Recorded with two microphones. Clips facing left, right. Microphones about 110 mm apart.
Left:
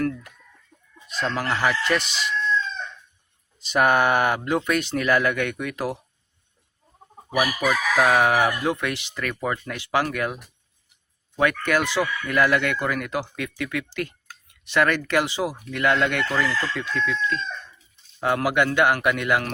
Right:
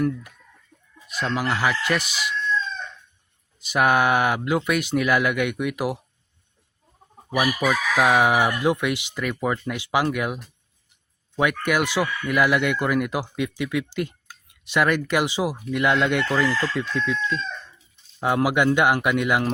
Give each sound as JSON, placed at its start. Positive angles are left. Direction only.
{"t": 0.0, "sound": "speech", "side_deg": -15}
{"t": 0.7, "sound": "chicken", "side_deg": 20}
{"t": 1.1, "sound": "speech", "side_deg": -5}
{"t": 3.6, "sound": "speech", "side_deg": -5}
{"t": 7.3, "sound": "chicken", "side_deg": 5}
{"t": 8.0, "sound": "speech", "side_deg": -15}